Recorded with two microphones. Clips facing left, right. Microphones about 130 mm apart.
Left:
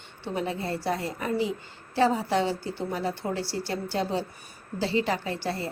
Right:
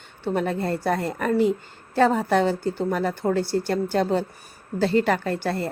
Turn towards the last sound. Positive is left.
turn(degrees=-55)  # may be behind; listen again after turning